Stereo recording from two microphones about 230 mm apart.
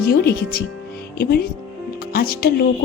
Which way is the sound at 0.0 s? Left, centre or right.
Left.